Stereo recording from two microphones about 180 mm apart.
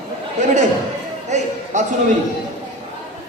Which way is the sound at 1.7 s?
40° right (ahead or behind).